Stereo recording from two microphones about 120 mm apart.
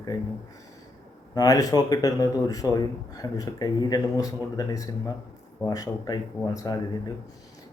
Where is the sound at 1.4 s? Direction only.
30° left (ahead or behind).